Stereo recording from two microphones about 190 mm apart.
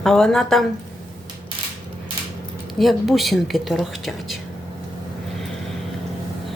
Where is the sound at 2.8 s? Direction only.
Centre (ahead or behind).